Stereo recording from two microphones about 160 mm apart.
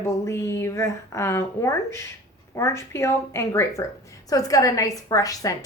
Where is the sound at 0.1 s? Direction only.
15° left (ahead or behind).